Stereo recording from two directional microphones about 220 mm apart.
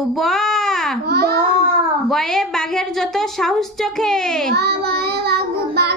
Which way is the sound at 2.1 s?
Centre (ahead or behind).